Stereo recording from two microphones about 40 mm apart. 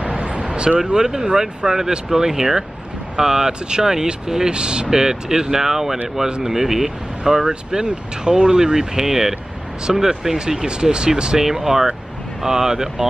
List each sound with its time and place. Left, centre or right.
0.0 s a sound: right
0.7 s speech: centre
11.4 s speech: centre